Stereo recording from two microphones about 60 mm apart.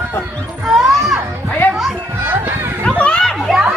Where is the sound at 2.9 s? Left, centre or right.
Centre.